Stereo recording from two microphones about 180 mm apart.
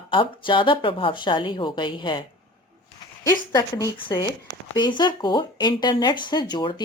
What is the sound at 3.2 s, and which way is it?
Speech, 20° left (ahead or behind).